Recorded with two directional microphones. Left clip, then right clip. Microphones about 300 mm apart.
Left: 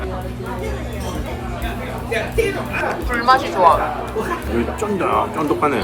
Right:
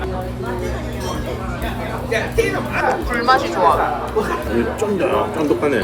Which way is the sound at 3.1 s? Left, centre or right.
Centre.